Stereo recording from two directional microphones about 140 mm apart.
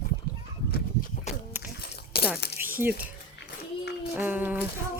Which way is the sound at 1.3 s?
55° left (ahead or behind).